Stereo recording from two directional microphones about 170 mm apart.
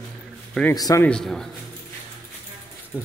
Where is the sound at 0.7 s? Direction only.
20° left (ahead or behind).